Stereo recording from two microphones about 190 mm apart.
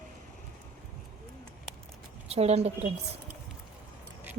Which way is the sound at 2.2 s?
35° right (ahead or behind).